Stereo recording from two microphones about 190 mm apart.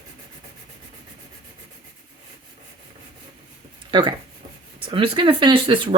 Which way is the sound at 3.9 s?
25° right (ahead or behind).